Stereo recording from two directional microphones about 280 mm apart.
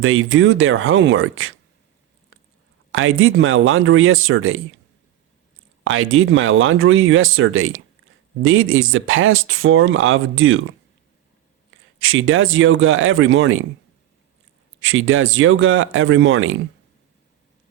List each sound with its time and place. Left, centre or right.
0.0 s speech: right
2.3 s a sound: right
2.9 s speech: right
5.8 s speech: right
14.8 s speech: right